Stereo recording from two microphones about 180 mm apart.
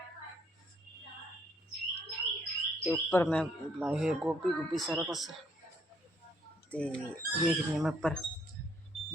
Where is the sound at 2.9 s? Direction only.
10° left (ahead or behind).